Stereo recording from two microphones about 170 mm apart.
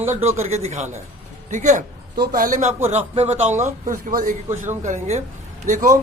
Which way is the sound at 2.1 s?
55° right (ahead or behind).